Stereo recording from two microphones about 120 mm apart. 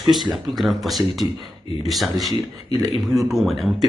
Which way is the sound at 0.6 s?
Centre (ahead or behind).